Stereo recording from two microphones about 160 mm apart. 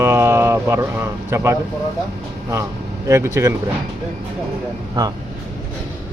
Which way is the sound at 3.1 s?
15° right (ahead or behind).